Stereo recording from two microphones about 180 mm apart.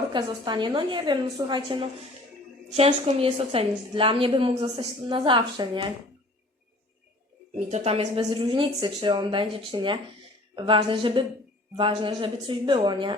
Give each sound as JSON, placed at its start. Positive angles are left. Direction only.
{"t": 0.1, "sound": "a woman's voice", "side_deg": -25}
{"t": 7.5, "sound": "a woman's voice", "side_deg": -35}